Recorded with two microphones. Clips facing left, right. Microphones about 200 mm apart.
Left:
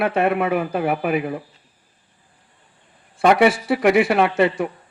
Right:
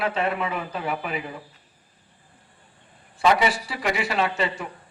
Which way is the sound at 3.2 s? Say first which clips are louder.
Left 6 dB; 55° left (ahead or behind).